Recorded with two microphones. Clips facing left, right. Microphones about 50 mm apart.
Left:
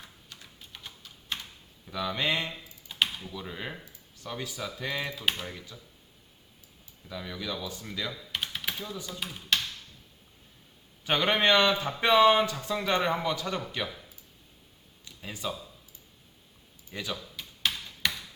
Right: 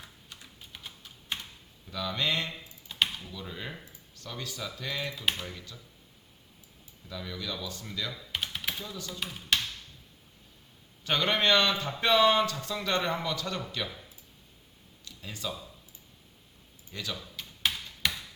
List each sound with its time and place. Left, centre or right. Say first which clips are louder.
0.3 s typing: even; centre
1.9 s speech: left 2 dB; centre
2.9 s typing: left 1 dB; centre
3.2 s speech: left 2 dB; centre
7.1 s speech: left 2 dB; centre
8.4 s typing: even; centre
8.9 s speech: left 2 dB; centre
11.0 s speech: left 2 dB; centre
15.0 s a sound: left 2 dB; centre
16.9 s speech: left 2 dB; centre
17.6 s tick-tock: even; centre